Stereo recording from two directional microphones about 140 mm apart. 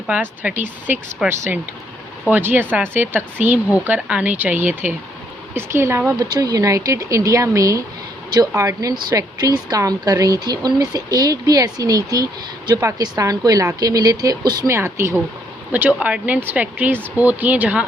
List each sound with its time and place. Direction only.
0.1 s speech: 10° right (ahead or behind)